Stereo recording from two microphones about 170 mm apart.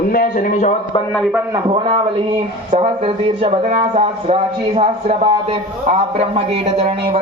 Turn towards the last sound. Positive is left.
turn(degrees=-35)  # may be behind; listen again after turning